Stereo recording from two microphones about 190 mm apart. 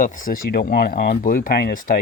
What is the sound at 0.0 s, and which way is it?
Speech, 45° left (ahead or behind).